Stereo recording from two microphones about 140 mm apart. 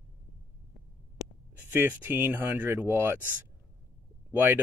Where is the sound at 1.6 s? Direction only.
15° right (ahead or behind).